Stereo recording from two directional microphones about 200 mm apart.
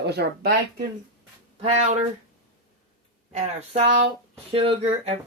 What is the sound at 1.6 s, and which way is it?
Speech, 35° right (ahead or behind).